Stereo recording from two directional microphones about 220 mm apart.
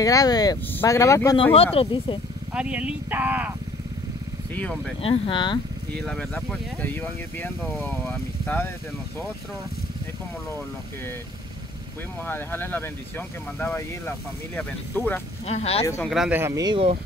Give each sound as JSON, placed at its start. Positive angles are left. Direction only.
{"t": 0.0, "sound": "speech", "side_deg": 15}
{"t": 1.5, "sound": "speech", "side_deg": 25}
{"t": 2.5, "sound": "speech", "side_deg": -5}
{"t": 4.6, "sound": "speech", "side_deg": 5}
{"t": 5.0, "sound": "speech", "side_deg": 25}
{"t": 5.9, "sound": "speech", "side_deg": 5}
{"t": 12.3, "sound": "speech", "side_deg": 10}
{"t": 15.4, "sound": "speech", "side_deg": 30}
{"t": 15.8, "sound": "speech", "side_deg": 10}
{"t": 16.1, "sound": "speech", "side_deg": -5}